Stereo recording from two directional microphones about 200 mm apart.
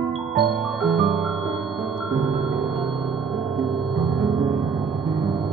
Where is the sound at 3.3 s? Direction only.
25° right (ahead or behind).